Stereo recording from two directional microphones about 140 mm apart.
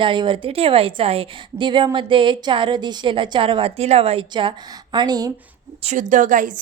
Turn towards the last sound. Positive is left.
turn(degrees=-65)  # may be behind; listen again after turning